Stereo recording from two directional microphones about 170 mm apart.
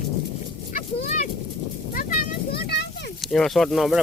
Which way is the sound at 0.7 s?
45° left (ahead or behind).